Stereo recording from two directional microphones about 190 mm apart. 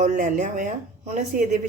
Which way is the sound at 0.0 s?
40° right (ahead or behind).